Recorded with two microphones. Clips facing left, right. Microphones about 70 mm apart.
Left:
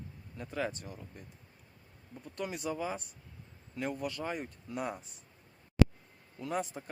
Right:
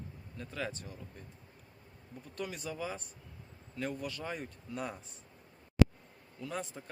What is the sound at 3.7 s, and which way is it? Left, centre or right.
Speech, centre.